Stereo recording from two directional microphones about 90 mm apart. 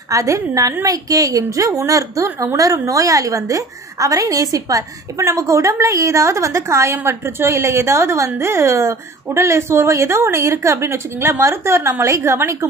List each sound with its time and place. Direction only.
0.1 s a woman's voice: 40° right (ahead or behind)